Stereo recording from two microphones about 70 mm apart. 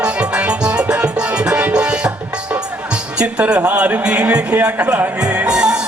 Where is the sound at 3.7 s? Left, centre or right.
Right.